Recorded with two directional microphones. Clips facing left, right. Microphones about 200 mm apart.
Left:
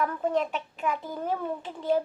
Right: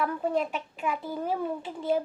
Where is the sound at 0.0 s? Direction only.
10° right (ahead or behind).